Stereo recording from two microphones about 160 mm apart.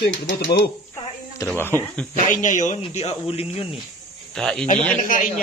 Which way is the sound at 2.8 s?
40° left (ahead or behind).